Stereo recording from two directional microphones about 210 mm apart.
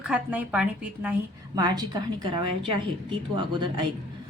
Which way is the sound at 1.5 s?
20° right (ahead or behind).